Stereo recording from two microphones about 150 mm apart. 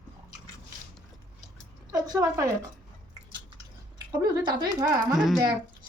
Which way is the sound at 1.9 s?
25° right (ahead or behind).